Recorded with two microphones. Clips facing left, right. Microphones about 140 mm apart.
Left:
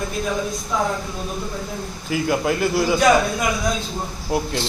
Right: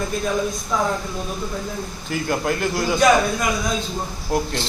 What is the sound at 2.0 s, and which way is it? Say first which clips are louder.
Speech: left 2 dB; 5° left (ahead or behind).